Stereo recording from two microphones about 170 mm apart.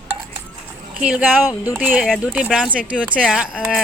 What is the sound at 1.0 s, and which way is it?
Speech, 5° right (ahead or behind).